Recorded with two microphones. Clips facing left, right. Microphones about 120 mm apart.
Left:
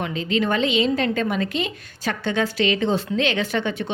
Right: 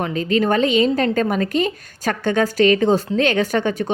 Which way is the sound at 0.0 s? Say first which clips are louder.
Right 4 dB; 45° right (ahead or behind).